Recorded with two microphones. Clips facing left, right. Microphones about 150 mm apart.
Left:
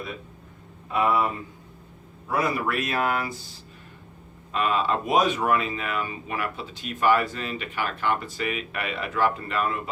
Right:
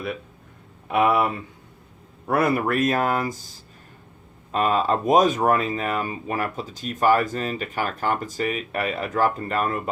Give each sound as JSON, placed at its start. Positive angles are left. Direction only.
{"t": 0.9, "sound": "speech", "side_deg": -75}
{"t": 2.2, "sound": "speech", "side_deg": -60}